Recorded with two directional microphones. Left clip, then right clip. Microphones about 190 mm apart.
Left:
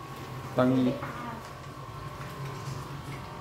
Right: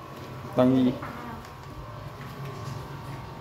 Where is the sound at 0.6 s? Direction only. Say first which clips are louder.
Right 3 dB; 15° right (ahead or behind).